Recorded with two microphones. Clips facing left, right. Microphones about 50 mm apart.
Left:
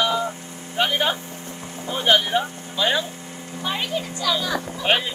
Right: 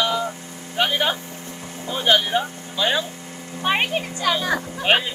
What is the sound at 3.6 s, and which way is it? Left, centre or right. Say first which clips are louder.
Speech: right 5 dB; right.